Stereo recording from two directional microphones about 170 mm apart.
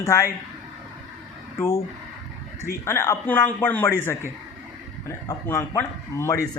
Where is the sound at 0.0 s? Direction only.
15° left (ahead or behind).